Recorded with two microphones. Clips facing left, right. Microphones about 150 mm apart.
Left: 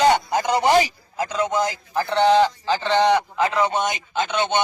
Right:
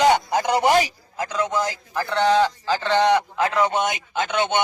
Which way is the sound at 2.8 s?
15° left (ahead or behind).